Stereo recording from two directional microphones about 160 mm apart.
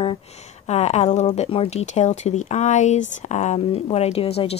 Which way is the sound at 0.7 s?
45° left (ahead or behind).